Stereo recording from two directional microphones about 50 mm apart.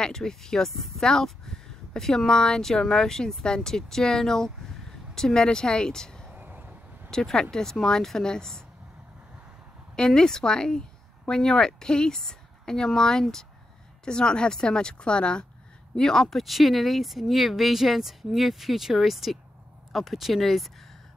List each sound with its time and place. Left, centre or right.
0.0 s speech: centre
6.3 s a sound: right
7.1 s speech: centre
9.9 s a woman's voice: centre